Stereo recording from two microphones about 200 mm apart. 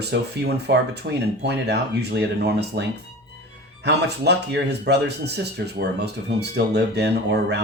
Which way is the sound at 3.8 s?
55° right (ahead or behind).